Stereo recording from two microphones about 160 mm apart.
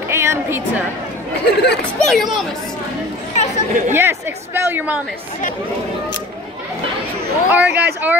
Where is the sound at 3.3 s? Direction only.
45° left (ahead or behind).